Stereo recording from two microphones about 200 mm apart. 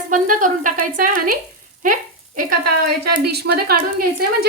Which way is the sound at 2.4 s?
45° right (ahead or behind).